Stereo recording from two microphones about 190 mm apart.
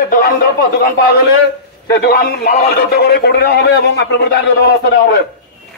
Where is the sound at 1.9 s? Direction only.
60° left (ahead or behind).